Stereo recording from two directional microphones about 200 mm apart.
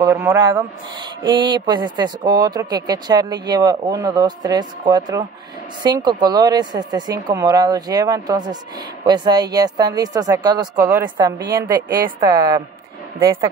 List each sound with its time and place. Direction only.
0.0 s speech: 15° right (ahead or behind)